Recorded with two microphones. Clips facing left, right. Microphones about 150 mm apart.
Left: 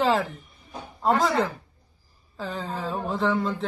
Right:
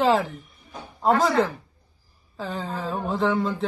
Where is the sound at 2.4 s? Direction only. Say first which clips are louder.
Right 1 dB; centre (ahead or behind).